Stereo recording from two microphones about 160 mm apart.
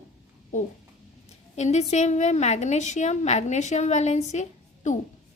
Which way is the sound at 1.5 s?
45° left (ahead or behind).